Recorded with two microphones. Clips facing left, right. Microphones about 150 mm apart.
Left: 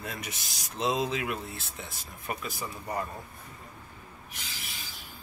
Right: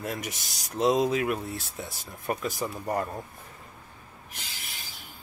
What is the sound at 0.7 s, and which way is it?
Speech, 45° right (ahead or behind).